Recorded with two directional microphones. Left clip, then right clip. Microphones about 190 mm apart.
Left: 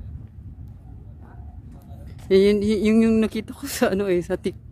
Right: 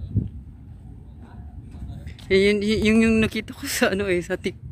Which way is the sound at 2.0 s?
20° left (ahead or behind).